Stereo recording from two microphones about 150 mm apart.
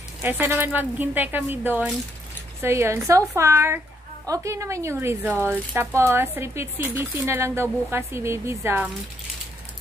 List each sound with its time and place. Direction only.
0.2 s speech: 15° right (ahead or behind)